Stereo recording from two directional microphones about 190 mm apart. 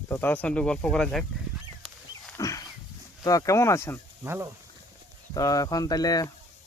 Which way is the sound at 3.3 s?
15° left (ahead or behind).